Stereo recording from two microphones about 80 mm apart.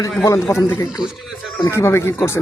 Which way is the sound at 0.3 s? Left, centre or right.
Left.